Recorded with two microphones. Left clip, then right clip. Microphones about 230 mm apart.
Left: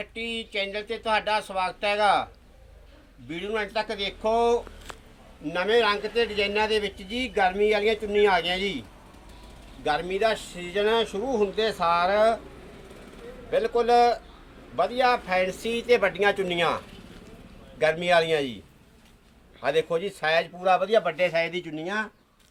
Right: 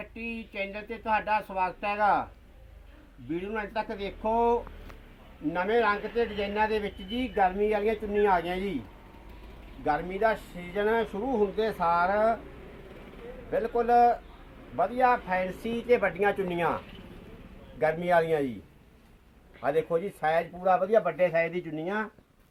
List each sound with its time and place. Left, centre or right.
0.3 s speech: left
3.2 s speech: left
9.8 s speech: left
13.5 s speech: left
17.7 s speech: left
19.6 s speech: left
20.2 s speech: centre
20.9 s speech: centre